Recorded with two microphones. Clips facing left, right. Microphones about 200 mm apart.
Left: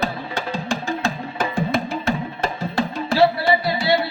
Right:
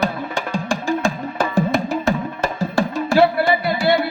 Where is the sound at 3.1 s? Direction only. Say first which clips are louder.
Right 1 dB; 50° right (ahead or behind).